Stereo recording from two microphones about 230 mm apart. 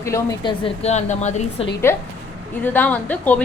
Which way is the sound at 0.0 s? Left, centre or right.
Centre.